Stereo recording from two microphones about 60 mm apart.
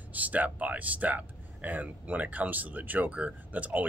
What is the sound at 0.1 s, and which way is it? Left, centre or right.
A man's voice, right.